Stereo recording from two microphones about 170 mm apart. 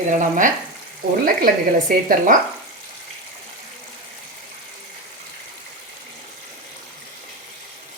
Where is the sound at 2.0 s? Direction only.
50° right (ahead or behind).